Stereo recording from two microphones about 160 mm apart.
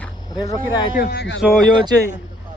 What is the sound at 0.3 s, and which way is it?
Speech, 25° left (ahead or behind).